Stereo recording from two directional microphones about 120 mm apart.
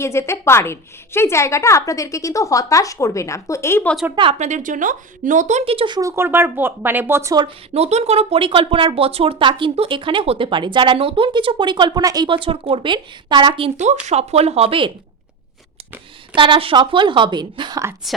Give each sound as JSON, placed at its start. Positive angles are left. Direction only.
{"t": 0.0, "sound": "a woman's voice", "side_deg": 20}
{"t": 4.1, "sound": "speech", "side_deg": -40}
{"t": 4.4, "sound": "speech", "side_deg": -85}
{"t": 5.6, "sound": "speech", "side_deg": -45}
{"t": 6.0, "sound": "speech", "side_deg": -25}
{"t": 7.4, "sound": "speech", "side_deg": -60}
{"t": 13.7, "sound": "speech", "side_deg": -70}
{"t": 16.3, "sound": "speech", "side_deg": -45}